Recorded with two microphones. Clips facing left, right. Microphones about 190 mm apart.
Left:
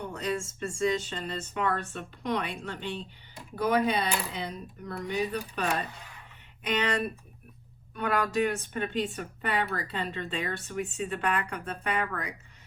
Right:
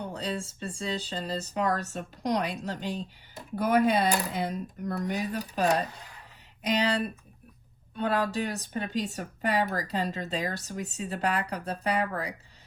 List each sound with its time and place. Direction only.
0.0 s speech: 30° right (ahead or behind)
7.9 s speech: 30° right (ahead or behind)